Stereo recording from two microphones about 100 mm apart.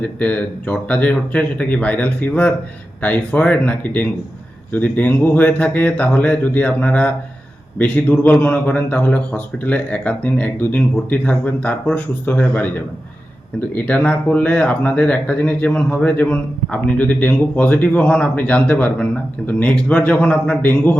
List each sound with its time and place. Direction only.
0.0 s speech: 15° left (ahead or behind)